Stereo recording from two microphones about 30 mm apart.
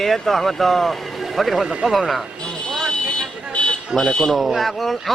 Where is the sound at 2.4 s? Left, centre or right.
Left.